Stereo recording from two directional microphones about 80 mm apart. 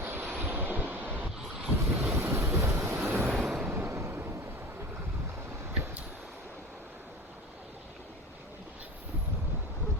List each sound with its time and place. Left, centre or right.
0.0 s vehicle: right
1.7 s wind noise: right
3.1 s vehicle: right
3.3 s vehicle: centre
3.7 s a sound: right